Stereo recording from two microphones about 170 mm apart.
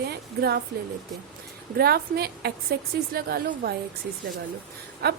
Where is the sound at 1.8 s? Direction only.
65° right (ahead or behind).